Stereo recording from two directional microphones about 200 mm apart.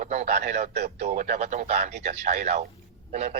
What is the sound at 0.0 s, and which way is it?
Speech, 35° right (ahead or behind).